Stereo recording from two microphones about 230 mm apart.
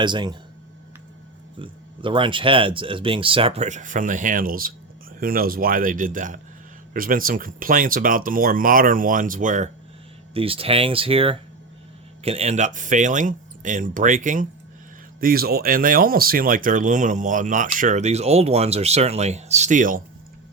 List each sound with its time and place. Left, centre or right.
0.0 s speech: centre
1.5 s speech: right
10.3 s speech: right